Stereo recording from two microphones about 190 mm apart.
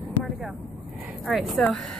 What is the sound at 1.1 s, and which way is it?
Speech, centre (ahead or behind).